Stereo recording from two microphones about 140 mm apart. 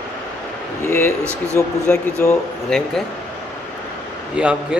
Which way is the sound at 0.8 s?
20° left (ahead or behind).